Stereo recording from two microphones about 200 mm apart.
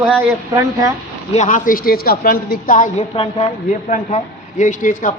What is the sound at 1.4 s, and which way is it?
A woman's voice, 40° left (ahead or behind).